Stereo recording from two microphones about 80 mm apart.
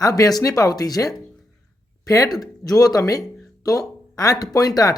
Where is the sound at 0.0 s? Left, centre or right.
Left.